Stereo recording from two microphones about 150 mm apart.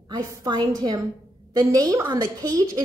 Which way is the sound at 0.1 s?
25° right (ahead or behind).